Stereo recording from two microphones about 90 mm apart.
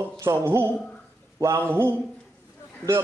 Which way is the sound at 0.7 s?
10° left (ahead or behind).